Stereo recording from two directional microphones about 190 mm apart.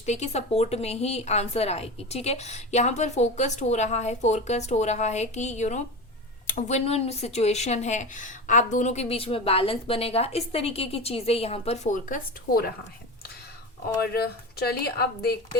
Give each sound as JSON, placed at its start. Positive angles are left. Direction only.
{"t": 0.0, "sound": "speech", "side_deg": 35}
{"t": 14.0, "sound": "a woman's voice", "side_deg": 55}